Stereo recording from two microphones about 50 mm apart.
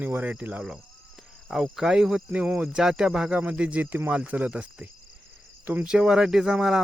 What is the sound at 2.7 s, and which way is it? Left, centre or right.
Speech, centre.